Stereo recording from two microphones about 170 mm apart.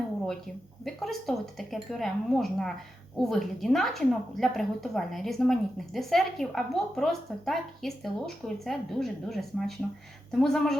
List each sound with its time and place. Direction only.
0.9 s a woman's voice: centre (ahead or behind)